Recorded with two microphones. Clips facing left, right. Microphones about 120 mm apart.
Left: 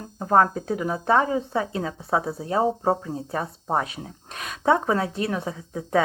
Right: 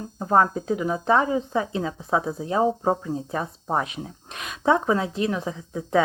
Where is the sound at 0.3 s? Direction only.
45° left (ahead or behind).